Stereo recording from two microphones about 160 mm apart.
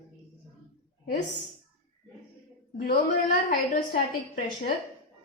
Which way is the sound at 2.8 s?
70° left (ahead or behind).